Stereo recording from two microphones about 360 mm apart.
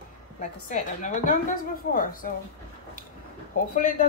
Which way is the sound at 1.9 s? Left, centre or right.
Left.